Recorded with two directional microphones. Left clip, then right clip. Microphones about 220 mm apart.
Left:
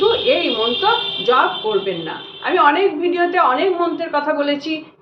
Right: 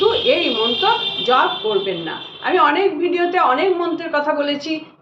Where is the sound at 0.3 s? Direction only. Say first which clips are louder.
Even; 5° right (ahead or behind).